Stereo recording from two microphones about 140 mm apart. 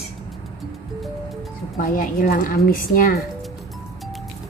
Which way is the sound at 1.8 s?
85° left.